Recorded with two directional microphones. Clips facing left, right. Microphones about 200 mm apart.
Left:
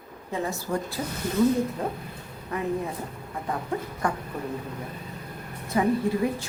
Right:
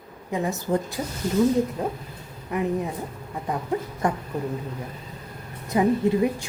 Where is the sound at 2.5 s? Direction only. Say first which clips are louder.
Right 3 dB; 15° right (ahead or behind).